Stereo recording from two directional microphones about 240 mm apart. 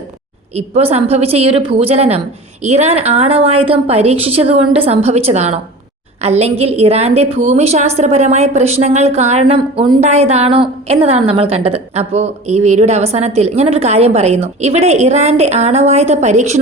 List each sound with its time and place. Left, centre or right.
0.5 s a woman's voice: right